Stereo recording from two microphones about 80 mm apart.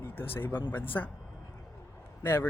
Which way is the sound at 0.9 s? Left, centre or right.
Left.